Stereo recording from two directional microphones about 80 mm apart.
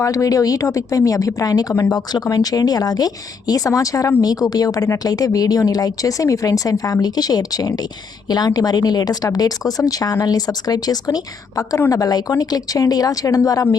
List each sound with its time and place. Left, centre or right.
0.0 s speech: left